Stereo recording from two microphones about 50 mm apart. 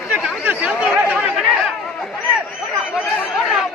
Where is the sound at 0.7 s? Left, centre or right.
Right.